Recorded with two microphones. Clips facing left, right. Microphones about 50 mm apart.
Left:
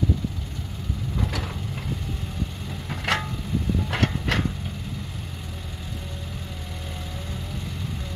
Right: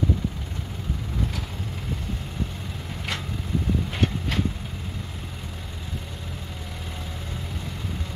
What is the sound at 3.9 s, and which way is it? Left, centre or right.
Vehicle, left.